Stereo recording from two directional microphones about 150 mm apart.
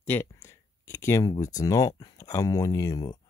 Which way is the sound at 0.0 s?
15° left (ahead or behind).